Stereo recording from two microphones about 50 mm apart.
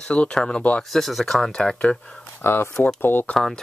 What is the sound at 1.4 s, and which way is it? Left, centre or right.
Speech, centre.